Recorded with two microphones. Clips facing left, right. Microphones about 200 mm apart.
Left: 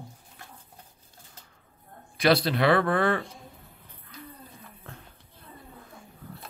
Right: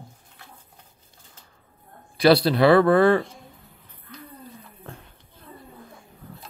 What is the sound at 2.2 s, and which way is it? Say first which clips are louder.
Speech: right 6 dB; 35° right (ahead or behind).